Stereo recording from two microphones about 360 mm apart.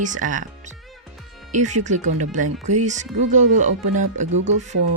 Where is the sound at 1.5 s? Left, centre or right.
Centre.